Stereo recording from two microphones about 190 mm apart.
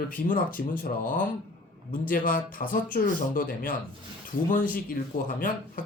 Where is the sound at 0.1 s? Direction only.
45° left (ahead or behind).